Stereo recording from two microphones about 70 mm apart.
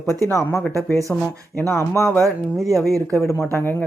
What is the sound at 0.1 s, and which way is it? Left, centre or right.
Speech, left.